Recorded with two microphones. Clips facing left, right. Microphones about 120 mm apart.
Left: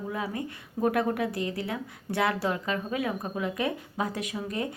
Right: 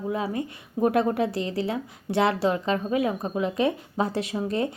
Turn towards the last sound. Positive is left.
turn(degrees=-30)  # may be behind; listen again after turning